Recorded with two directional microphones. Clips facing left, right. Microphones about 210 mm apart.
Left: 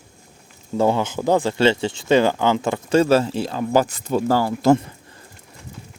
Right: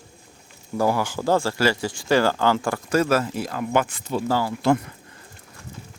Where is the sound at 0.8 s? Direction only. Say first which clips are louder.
Left 3 dB; 20° left (ahead or behind); by 4.7 s 45° left (ahead or behind).